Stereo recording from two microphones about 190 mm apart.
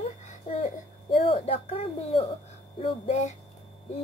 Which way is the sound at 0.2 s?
35° left (ahead or behind).